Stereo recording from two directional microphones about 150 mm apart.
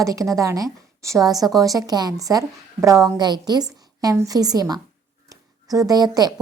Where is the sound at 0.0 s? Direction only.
20° right (ahead or behind).